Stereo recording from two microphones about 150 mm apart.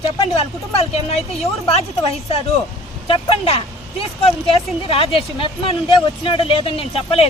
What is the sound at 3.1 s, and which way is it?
Speech, 40° left (ahead or behind).